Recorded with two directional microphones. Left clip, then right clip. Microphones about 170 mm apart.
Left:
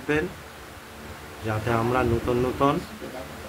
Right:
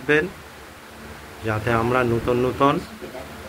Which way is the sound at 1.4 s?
15° right (ahead or behind).